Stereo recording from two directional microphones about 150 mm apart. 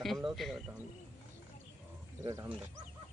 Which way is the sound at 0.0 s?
Centre (ahead or behind).